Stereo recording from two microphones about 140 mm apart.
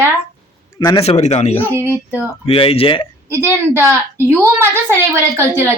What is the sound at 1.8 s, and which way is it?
Speech, 20° right (ahead or behind).